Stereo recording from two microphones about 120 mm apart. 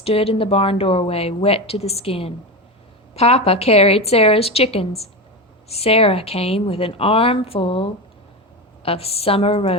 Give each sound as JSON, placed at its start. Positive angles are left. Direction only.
{"t": 0.0, "sound": "a woman's voice", "side_deg": 55}